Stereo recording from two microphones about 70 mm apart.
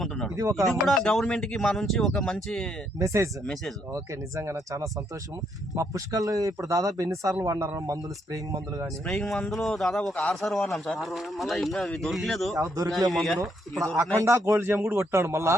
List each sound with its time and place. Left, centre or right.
0.5 s speech: centre
3.0 s speech: right
9.0 s speech: centre
12.5 s speech: right
13.1 s speech: centre
14.2 s speech: right
14.6 s a man's voice: right